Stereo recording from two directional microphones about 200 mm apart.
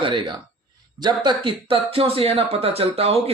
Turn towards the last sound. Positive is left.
turn(degrees=-30)  # may be behind; listen again after turning